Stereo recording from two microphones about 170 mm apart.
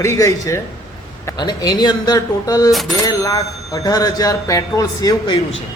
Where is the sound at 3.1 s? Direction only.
20° left (ahead or behind).